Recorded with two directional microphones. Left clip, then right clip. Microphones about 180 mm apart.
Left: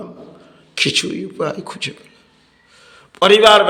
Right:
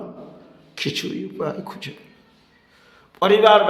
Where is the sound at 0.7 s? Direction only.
15° left (ahead or behind).